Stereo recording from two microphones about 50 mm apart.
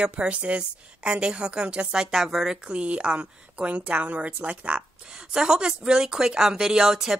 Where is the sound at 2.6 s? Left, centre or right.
Right.